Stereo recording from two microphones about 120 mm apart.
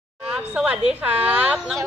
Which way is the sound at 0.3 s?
10° right (ahead or behind).